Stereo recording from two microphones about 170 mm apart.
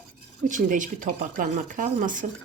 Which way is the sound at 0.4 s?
50° right (ahead or behind).